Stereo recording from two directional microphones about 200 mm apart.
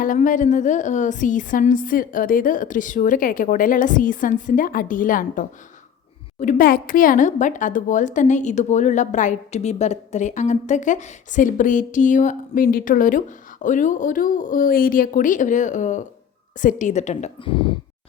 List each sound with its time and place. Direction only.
0.0 s a woman's voice: 40° left (ahead or behind); by 17.7 s 25° left (ahead or behind)